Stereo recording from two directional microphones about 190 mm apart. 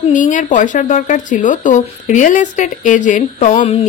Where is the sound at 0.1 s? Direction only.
40° left (ahead or behind).